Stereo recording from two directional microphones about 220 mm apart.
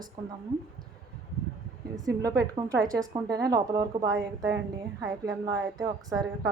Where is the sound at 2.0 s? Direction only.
15° right (ahead or behind).